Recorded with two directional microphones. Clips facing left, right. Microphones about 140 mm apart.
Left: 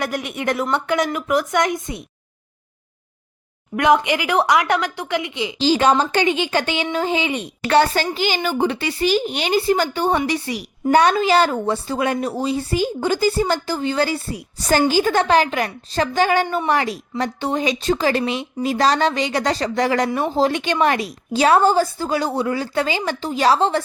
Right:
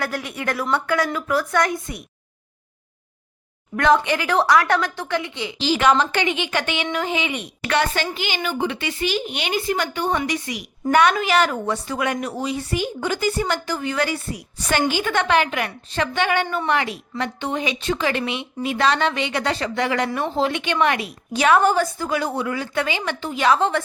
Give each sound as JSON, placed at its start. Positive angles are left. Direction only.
{"t": 0.0, "sound": "speech", "side_deg": 20}
{"t": 3.8, "sound": "a woman's voice", "side_deg": 15}
{"t": 5.5, "sound": "a woman's voice", "side_deg": 30}